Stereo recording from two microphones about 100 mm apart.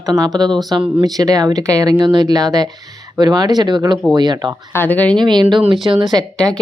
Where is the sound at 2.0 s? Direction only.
50° right (ahead or behind).